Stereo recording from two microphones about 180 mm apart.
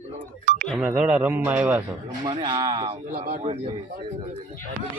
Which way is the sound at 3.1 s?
55° right (ahead or behind).